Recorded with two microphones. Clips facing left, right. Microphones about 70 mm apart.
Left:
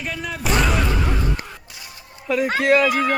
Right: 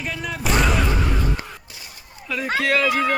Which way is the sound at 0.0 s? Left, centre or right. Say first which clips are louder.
Even; centre.